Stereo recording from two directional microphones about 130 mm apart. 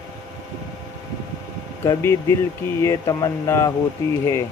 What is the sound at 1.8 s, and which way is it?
Speech, 20° left (ahead or behind).